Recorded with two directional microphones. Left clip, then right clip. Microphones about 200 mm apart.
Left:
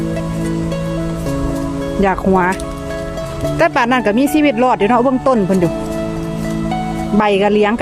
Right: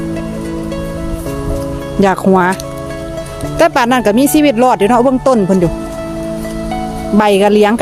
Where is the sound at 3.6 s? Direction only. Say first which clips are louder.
Right 3 dB; 20° right (ahead or behind).